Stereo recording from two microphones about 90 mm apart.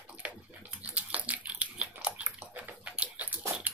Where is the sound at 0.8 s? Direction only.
15° right (ahead or behind).